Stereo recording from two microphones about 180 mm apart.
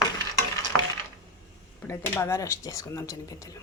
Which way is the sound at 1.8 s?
15° left (ahead or behind).